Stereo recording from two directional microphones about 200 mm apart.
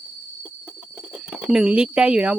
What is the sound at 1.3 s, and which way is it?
Speech, 5° right (ahead or behind).